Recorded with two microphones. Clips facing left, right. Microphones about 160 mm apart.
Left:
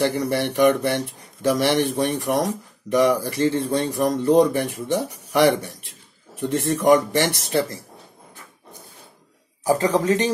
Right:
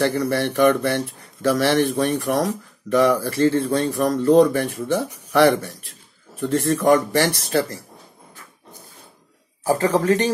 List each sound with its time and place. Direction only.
0.0 s speech: 15° left (ahead or behind)
9.7 s speech: 15° left (ahead or behind)